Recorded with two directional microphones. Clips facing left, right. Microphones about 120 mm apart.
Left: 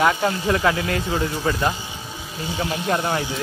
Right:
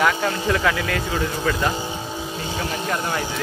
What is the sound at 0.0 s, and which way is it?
Speech, 30° left (ahead or behind).